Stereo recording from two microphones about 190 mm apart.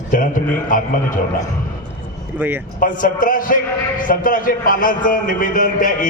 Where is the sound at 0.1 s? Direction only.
45° left (ahead or behind).